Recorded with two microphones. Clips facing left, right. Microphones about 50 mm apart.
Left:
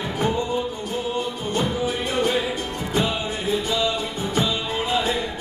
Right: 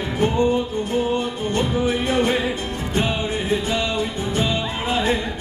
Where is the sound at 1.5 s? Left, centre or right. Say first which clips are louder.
Right 3 dB; right.